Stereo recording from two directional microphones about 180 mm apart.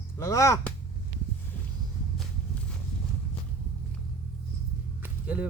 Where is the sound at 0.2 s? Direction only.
15° left (ahead or behind).